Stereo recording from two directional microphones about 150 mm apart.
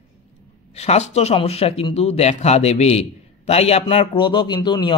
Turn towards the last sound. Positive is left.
turn(degrees=30)  # may be behind; listen again after turning